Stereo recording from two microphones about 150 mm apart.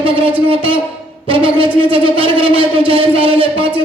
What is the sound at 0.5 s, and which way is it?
A man's voice, 35° right (ahead or behind).